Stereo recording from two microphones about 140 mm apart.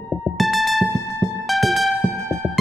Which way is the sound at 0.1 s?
Centre (ahead or behind).